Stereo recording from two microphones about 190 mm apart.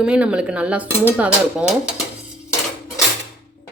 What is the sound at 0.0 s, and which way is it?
Speech, 5° right (ahead or behind).